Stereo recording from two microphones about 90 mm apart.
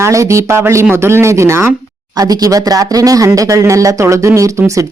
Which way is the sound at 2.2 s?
45° right (ahead or behind).